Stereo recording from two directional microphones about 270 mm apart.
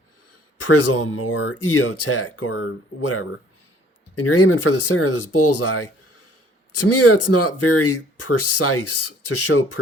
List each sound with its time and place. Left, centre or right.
0.6 s a man's voice: left